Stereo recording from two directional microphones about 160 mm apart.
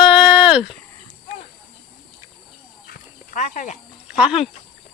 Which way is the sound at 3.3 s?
50° left (ahead or behind).